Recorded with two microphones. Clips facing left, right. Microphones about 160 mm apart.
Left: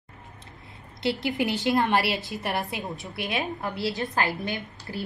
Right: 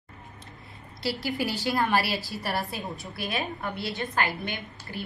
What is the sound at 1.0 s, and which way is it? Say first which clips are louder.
Speech: left 3 dB; 20° left (ahead or behind).